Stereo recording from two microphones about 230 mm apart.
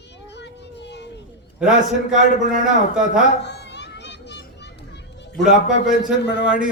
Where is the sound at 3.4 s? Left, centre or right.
Left.